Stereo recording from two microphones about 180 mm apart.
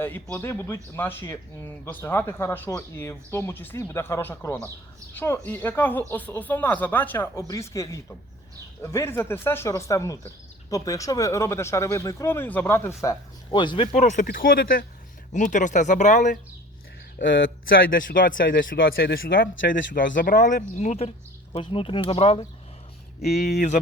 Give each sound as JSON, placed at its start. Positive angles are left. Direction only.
{"t": 0.0, "sound": "speech", "side_deg": 10}
{"t": 13.9, "sound": "speech", "side_deg": 45}
{"t": 14.3, "sound": "speech", "side_deg": 55}
{"t": 17.9, "sound": "speech", "side_deg": 50}
{"t": 23.2, "sound": "speech", "side_deg": 60}
{"t": 23.6, "sound": "speech", "side_deg": 45}